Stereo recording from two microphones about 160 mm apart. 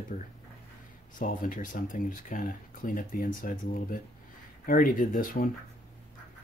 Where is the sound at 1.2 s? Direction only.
55° left (ahead or behind).